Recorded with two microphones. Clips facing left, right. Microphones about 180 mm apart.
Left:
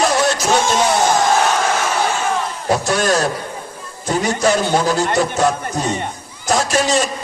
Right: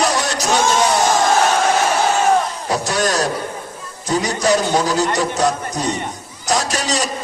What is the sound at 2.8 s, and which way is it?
A man's voice, 40° right (ahead or behind).